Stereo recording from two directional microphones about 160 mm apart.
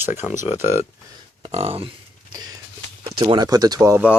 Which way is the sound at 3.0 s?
30° right (ahead or behind).